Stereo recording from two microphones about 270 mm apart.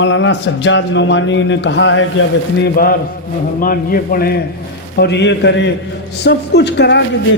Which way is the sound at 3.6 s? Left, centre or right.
Left.